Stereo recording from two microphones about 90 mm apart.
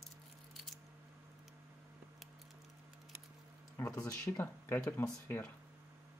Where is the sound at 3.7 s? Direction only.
35° left (ahead or behind).